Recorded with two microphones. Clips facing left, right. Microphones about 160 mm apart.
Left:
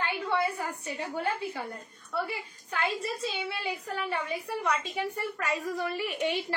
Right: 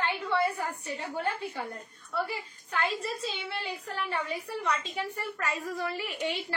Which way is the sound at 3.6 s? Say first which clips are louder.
Left 2 dB; 10° left (ahead or behind).